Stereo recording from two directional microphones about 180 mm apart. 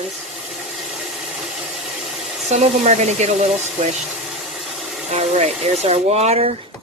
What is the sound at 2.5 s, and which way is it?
Speech, 40° right (ahead or behind).